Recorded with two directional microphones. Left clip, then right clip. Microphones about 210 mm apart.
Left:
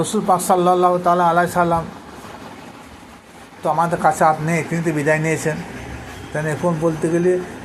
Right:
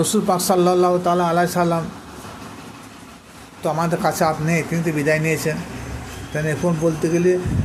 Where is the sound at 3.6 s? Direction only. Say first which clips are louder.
Left 4 dB; 25° right (ahead or behind).